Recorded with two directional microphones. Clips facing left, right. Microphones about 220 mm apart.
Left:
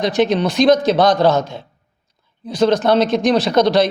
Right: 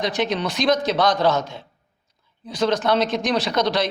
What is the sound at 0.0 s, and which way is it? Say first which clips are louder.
Speech: left 7 dB; 50° left (ahead or behind).